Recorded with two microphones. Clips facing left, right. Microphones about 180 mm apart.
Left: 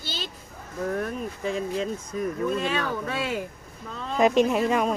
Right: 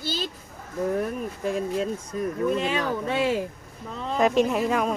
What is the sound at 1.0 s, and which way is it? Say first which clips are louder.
Speech: right 2 dB; 5° right (ahead or behind).